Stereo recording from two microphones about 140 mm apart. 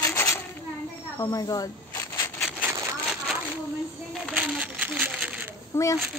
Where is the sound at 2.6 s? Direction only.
20° right (ahead or behind).